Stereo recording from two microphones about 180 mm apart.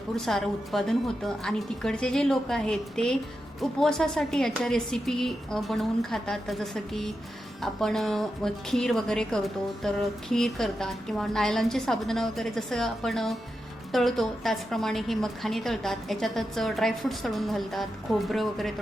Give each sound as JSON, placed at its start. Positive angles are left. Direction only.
{"t": 0.2, "sound": "a woman's voice", "side_deg": 0}